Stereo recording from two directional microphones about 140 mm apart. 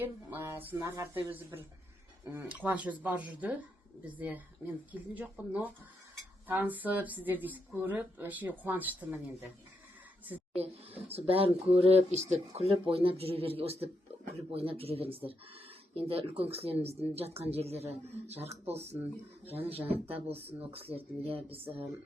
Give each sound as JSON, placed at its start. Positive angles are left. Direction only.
{"t": 0.0, "sound": "speech", "side_deg": -15}
{"t": 10.9, "sound": "speech", "side_deg": -45}
{"t": 20.1, "sound": "speech", "side_deg": -45}